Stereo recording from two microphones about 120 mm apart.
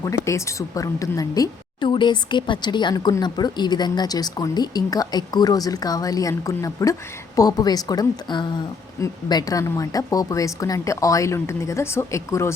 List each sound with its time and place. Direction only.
0.0 s a woman's voice: 25° left (ahead or behind)